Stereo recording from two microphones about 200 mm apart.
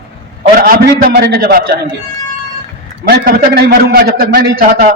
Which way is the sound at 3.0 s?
50° right (ahead or behind).